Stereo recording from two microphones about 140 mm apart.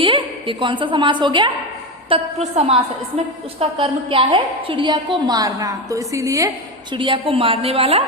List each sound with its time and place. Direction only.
0.0 s a woman's voice: 40° right (ahead or behind)
2.4 s a woman's voice: 45° right (ahead or behind); by 6.5 s 25° right (ahead or behind)
6.9 s a woman's voice: 35° right (ahead or behind)